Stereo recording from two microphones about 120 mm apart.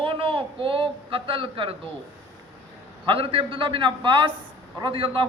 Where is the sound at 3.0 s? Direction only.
50° right (ahead or behind).